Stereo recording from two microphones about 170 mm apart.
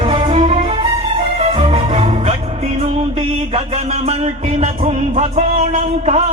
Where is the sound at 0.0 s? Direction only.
30° right (ahead or behind).